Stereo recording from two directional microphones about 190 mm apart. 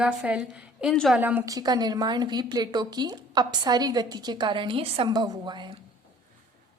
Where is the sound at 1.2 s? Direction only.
10° right (ahead or behind).